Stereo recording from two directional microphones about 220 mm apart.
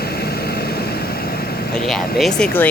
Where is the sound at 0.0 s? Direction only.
45° left (ahead or behind).